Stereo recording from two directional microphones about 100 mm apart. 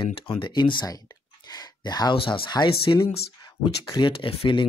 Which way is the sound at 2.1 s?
60° left (ahead or behind).